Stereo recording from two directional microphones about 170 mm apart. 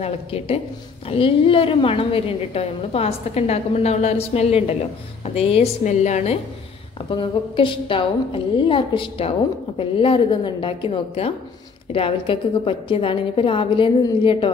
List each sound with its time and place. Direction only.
0.0 s a woman's voice: 35° left (ahead or behind)
7.1 s a woman's voice: 30° left (ahead or behind)